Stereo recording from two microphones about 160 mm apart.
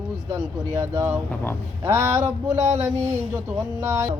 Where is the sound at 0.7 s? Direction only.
15° right (ahead or behind).